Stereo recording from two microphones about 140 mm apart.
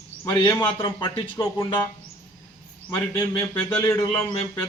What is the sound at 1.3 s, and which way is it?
Speech, 20° left (ahead or behind).